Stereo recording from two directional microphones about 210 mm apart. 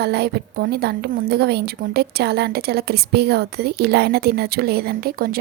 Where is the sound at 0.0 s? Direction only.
50° right (ahead or behind).